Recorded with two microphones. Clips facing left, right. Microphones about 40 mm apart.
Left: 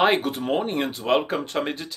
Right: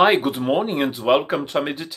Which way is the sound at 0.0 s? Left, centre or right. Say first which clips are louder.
Right 4 dB; right.